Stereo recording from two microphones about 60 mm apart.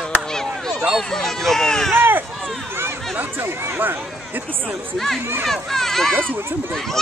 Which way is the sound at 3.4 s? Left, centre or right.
Right.